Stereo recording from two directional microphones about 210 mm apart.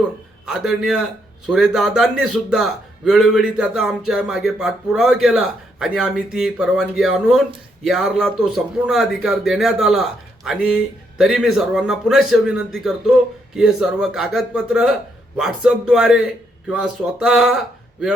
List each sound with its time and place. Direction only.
0.4 s a man's voice: centre (ahead or behind)